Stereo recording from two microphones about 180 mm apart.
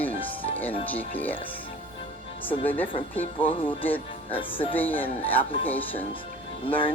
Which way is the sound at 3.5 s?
30° left (ahead or behind).